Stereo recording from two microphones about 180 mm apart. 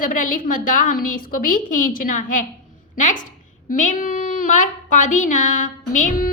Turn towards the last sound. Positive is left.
turn(degrees=45)  # may be behind; listen again after turning